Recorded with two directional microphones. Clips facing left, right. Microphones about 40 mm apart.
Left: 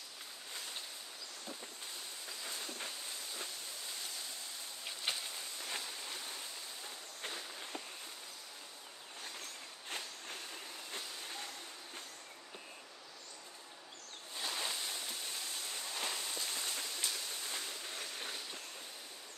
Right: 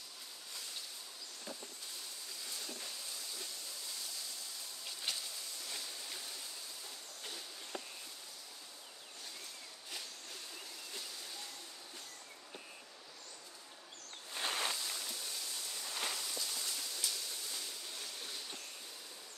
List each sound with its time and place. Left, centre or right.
4.8 s a sound: left
7.2 s walk: left
9.8 s vehicle: left
14.3 s a sound: right
14.8 s stream: left
16.1 s rain: left